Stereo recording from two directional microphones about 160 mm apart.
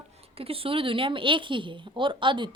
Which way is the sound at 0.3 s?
35° right (ahead or behind).